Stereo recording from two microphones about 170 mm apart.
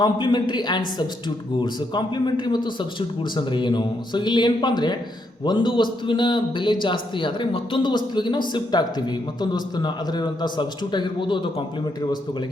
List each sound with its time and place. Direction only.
0.0 s a man's voice: 25° left (ahead or behind)